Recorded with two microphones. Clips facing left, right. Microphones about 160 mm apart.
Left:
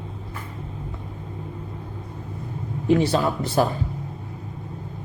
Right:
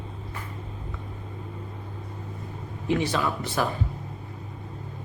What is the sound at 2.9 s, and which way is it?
Speech, 35° left (ahead or behind).